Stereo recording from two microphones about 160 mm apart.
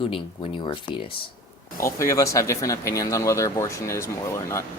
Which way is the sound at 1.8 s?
20° left (ahead or behind).